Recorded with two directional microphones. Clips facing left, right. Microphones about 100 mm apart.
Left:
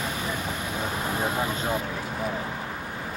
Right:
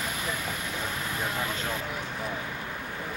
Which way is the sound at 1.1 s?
30° left (ahead or behind).